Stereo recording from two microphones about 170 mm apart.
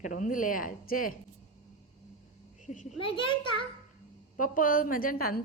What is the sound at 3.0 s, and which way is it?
Speech, 30° left (ahead or behind).